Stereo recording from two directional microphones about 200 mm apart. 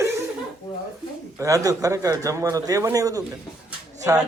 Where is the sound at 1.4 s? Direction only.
15° right (ahead or behind).